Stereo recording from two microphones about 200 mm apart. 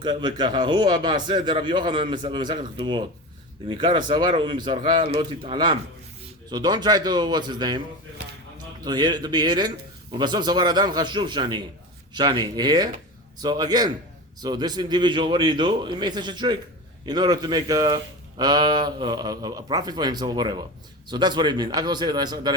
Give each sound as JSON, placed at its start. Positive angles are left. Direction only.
{"t": 0.0, "sound": "speech", "side_deg": -20}
{"t": 8.8, "sound": "speech", "side_deg": -20}